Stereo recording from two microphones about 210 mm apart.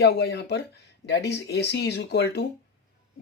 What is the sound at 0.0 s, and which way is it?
Speech, 55° left (ahead or behind).